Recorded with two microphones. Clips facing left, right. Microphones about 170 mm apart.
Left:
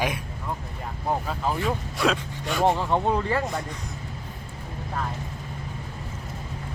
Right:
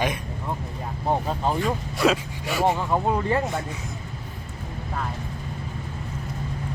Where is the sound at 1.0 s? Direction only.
25° right (ahead or behind).